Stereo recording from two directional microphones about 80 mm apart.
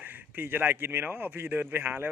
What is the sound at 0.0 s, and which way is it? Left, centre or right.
Speech, right.